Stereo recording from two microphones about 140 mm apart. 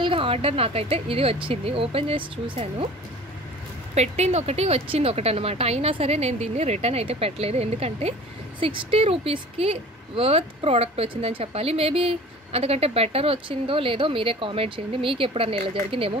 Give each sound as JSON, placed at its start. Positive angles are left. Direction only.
{"t": 0.0, "sound": "speech", "side_deg": -40}
{"t": 3.9, "sound": "speech", "side_deg": -50}